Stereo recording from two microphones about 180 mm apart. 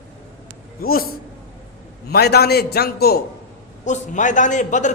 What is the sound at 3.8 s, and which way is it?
A man's voice, 45° left (ahead or behind).